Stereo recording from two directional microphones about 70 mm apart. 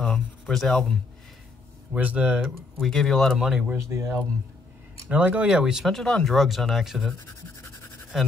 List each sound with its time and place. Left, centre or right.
0.0 s speech: centre
2.0 s speech: centre
2.4 s speech: centre
3.3 s speech: centre
3.7 s speech: right
5.1 s speech: centre
5.9 s speech: centre
8.1 s speech: centre